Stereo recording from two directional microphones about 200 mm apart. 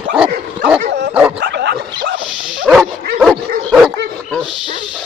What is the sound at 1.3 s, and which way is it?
Bow-wow, 60° right (ahead or behind).